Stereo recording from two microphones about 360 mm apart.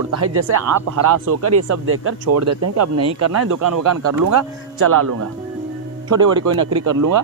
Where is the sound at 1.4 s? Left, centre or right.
Right.